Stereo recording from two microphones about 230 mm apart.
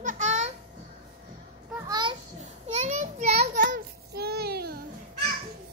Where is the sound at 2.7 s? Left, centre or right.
Right.